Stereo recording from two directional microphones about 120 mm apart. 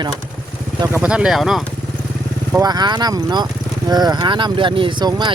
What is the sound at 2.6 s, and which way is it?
Speech, 35° right (ahead or behind).